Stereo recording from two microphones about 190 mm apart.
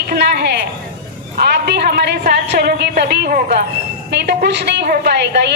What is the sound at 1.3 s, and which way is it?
A woman's voice, 60° right (ahead or behind).